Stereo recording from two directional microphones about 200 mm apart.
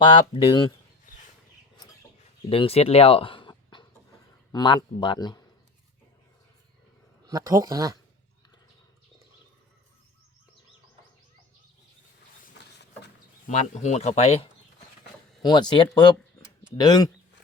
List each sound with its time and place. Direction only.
0.0 s speech: 20° left (ahead or behind)
2.5 s speech: 30° left (ahead or behind)
7.3 s speech: 20° right (ahead or behind)
13.5 s speech: 35° left (ahead or behind)
15.4 s speech: 20° left (ahead or behind)